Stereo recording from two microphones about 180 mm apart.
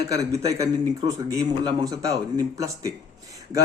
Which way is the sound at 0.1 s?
15° right (ahead or behind).